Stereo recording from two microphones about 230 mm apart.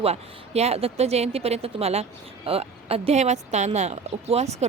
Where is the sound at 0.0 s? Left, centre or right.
Right.